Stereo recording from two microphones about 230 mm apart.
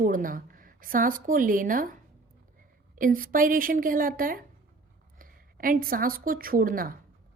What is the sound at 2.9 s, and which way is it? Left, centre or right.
A woman's voice, right.